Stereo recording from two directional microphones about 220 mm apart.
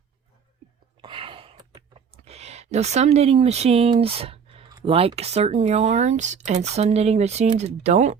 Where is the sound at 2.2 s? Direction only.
30° right (ahead or behind).